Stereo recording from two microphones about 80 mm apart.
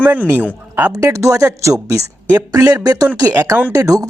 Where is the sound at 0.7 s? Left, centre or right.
Right.